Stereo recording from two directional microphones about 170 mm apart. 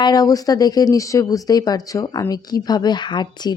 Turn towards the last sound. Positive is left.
turn(degrees=25)  # may be behind; listen again after turning